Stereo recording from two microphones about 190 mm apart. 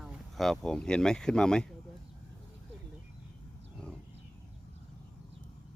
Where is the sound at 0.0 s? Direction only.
Centre (ahead or behind).